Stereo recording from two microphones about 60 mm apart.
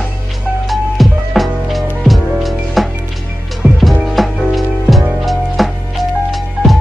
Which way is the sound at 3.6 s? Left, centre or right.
Right.